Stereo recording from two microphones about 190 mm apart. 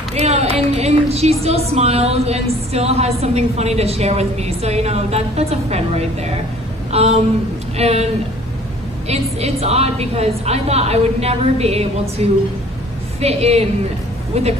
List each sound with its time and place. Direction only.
0.1 s a sound: 35° right (ahead or behind)
1.4 s a woman's voice: 35° right (ahead or behind)
9.1 s a woman's voice: 35° right (ahead or behind)